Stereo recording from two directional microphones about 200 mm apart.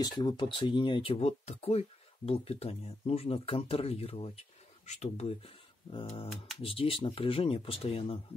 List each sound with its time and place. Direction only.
0.0 s speech: 20° left (ahead or behind)